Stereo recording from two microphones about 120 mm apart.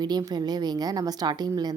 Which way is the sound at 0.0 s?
35° right (ahead or behind).